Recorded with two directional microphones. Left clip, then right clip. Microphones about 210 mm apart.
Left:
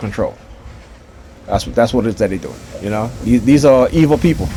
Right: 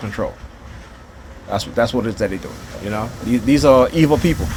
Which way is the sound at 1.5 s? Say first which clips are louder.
Left 4 dB; 65° left (ahead or behind).